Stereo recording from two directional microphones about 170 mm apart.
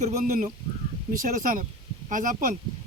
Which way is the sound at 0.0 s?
45° right (ahead or behind).